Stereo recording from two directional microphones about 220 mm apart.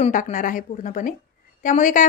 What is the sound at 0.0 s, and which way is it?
A woman's voice, 35° left (ahead or behind).